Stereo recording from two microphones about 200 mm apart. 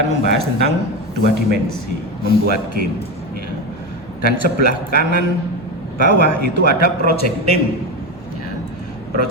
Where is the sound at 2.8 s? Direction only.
50° right (ahead or behind).